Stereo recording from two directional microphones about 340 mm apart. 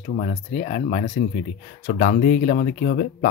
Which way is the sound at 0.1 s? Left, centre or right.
Centre.